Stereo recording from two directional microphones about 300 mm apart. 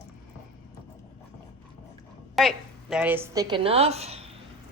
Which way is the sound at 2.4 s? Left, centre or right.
Centre.